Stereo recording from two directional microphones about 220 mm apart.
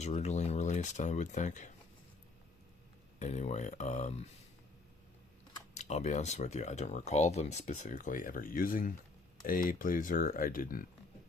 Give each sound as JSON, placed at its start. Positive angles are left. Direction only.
{"t": 0.0, "sound": "speech", "side_deg": 30}
{"t": 3.2, "sound": "speech", "side_deg": 30}
{"t": 5.7, "sound": "speech", "side_deg": 30}